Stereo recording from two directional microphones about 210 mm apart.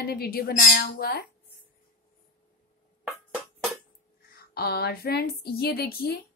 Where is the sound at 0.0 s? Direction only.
45° left (ahead or behind).